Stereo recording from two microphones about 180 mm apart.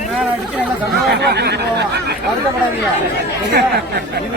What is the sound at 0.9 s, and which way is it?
Speech, 65° right (ahead or behind).